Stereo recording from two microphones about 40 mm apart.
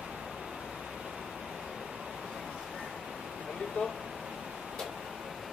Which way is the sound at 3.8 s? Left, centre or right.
Left.